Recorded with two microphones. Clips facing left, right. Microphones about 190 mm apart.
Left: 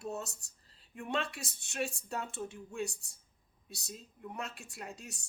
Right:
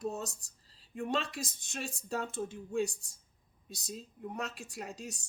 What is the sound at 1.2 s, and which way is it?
Speech, 65° left (ahead or behind).